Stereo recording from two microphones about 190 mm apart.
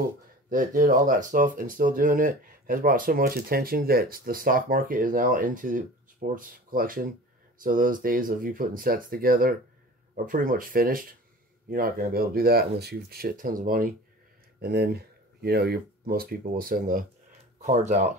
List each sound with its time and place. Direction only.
0.5 s speech: 45° right (ahead or behind)